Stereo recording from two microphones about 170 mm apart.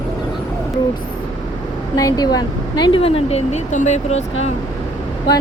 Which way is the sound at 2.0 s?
20° left (ahead or behind).